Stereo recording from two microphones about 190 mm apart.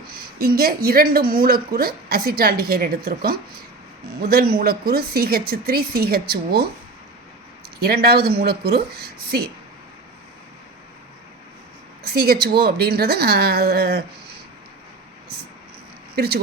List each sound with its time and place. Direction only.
0.1 s a woman's voice: 50° right (ahead or behind)
7.8 s a woman's voice: 55° right (ahead or behind)
12.0 s a woman's voice: 55° right (ahead or behind)
16.1 s a woman's voice: 55° right (ahead or behind)